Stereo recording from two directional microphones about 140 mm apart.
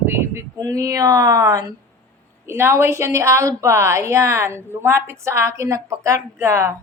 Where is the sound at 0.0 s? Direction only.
15° right (ahead or behind).